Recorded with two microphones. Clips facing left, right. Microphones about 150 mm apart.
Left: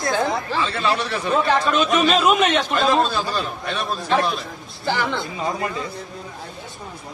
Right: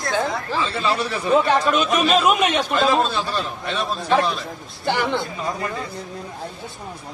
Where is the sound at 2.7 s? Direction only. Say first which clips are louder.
Even; centre (ahead or behind).